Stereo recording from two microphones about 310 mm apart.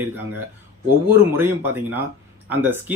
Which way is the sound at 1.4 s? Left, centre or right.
Centre.